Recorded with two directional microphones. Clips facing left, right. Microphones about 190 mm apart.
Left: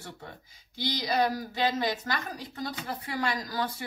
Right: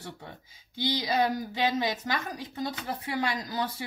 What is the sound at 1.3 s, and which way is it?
Speech, 20° right (ahead or behind).